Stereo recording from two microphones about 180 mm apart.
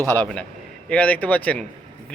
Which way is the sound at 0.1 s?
10° left (ahead or behind).